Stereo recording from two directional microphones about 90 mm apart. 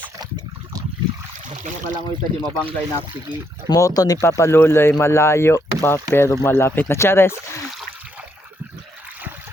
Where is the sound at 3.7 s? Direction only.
40° left (ahead or behind).